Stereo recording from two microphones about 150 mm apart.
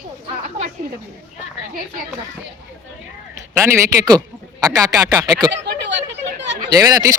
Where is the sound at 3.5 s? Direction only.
20° right (ahead or behind).